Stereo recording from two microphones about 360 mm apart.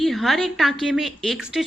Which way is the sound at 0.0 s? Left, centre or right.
Centre.